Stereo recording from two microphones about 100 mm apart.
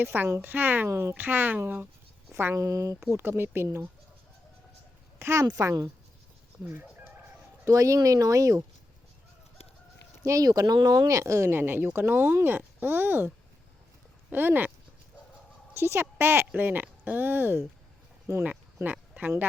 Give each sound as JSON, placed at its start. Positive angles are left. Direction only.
{"t": 0.0, "sound": "speech", "side_deg": -20}
{"t": 5.2, "sound": "speech", "side_deg": -30}
{"t": 7.6, "sound": "speech", "side_deg": -30}
{"t": 10.2, "sound": "speech", "side_deg": -35}
{"t": 15.7, "sound": "a woman's voice", "side_deg": -25}
{"t": 18.4, "sound": "sheep", "side_deg": -15}